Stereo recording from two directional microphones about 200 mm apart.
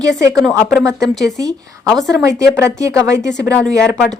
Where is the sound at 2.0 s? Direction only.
15° right (ahead or behind).